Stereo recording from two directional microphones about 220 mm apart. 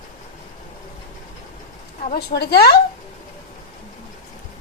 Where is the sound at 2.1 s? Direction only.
45° left (ahead or behind).